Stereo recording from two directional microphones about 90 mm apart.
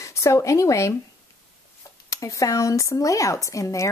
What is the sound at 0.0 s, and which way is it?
Speech, 35° left (ahead or behind).